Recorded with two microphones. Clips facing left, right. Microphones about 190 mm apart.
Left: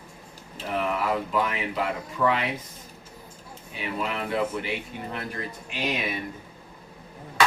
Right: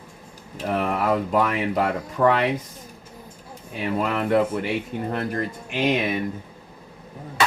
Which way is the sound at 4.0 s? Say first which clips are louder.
Right 7 dB; 50° right (ahead or behind).